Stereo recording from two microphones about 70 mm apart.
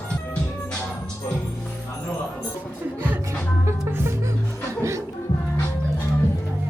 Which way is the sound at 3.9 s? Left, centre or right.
Right.